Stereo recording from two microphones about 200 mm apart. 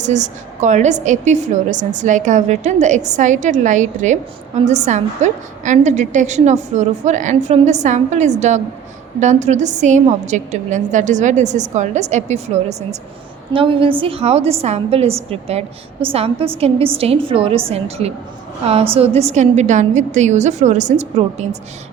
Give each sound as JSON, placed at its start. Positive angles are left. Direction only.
{"t": 0.0, "sound": "a woman's voice", "side_deg": -35}